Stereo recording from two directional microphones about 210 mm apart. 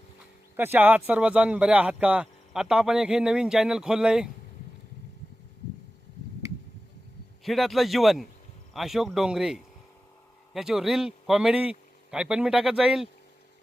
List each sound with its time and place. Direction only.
0.5 s speech: 10° right (ahead or behind)
7.4 s speech: centre (ahead or behind)